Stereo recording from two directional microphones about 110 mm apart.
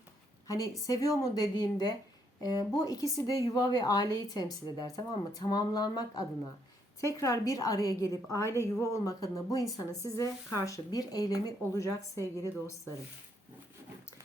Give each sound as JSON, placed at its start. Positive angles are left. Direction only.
{"t": 0.4, "sound": "a woman's voice", "side_deg": 30}